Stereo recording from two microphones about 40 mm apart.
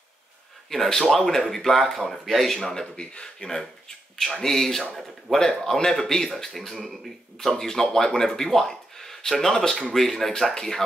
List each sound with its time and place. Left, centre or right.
0.7 s speech: centre
3.0 s speech: left
4.2 s speech: centre